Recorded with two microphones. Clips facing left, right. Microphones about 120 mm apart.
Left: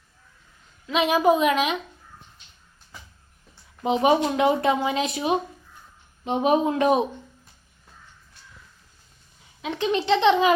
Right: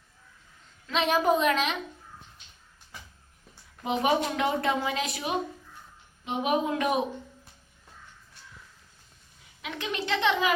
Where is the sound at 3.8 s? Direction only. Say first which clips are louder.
Left 6 dB; 20° left (ahead or behind).